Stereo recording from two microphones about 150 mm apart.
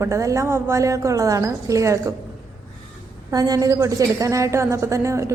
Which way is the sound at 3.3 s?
25° right (ahead or behind).